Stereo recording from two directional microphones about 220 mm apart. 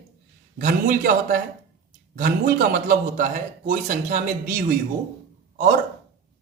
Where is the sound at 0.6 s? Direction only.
40° right (ahead or behind).